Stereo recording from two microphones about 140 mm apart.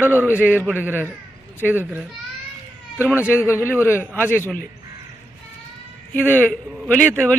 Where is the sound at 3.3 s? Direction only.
20° left (ahead or behind).